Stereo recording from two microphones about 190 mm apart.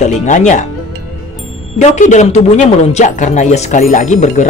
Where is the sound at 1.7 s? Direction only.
40° left (ahead or behind).